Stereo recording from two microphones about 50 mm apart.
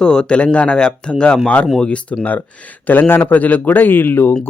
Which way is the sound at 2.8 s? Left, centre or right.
Left.